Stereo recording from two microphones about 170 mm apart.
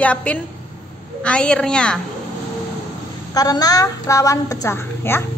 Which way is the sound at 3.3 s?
20° left (ahead or behind).